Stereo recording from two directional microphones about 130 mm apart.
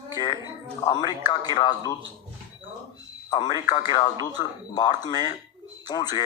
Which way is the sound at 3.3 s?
35° left (ahead or behind).